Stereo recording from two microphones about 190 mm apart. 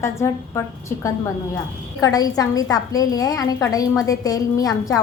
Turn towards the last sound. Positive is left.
turn(degrees=20)  # may be behind; listen again after turning